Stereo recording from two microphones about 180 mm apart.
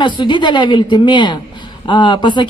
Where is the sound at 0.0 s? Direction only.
25° left (ahead or behind).